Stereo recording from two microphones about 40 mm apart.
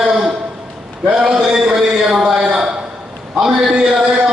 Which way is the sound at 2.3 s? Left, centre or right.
Centre.